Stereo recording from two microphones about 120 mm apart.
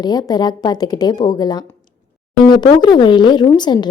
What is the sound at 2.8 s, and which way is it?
Speech, 35° left (ahead or behind).